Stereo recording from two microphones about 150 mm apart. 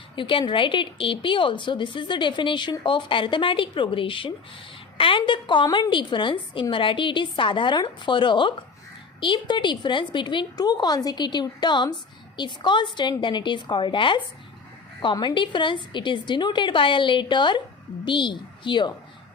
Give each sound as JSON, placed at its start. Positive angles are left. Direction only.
{"t": 0.2, "sound": "a woman's voice", "side_deg": 35}